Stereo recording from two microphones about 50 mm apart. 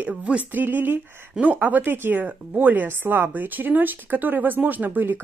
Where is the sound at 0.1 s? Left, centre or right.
Right.